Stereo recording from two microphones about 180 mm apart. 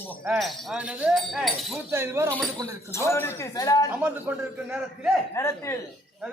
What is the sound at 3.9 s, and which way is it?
A man's voice, 10° right (ahead or behind).